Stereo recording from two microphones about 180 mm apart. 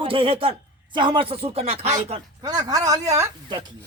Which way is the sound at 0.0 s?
30° right (ahead or behind).